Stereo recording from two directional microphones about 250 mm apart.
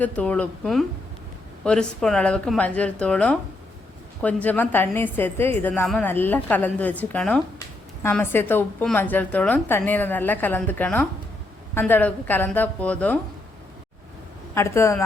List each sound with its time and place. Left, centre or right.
0.0 s a woman's voice: centre
14.5 s a woman's voice: centre